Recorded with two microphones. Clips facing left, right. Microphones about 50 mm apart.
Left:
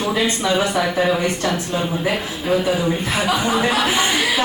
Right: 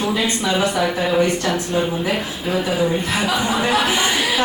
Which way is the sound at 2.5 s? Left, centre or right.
Centre.